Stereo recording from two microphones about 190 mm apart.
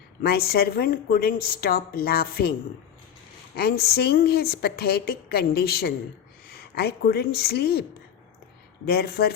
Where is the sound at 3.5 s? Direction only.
55° left (ahead or behind).